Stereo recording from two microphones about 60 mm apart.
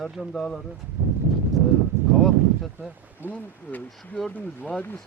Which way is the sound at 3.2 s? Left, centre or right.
Right.